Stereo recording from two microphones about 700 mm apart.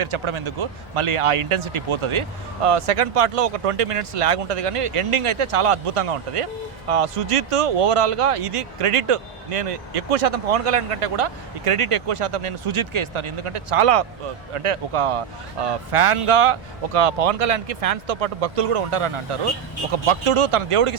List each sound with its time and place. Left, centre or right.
0.0 s speech: right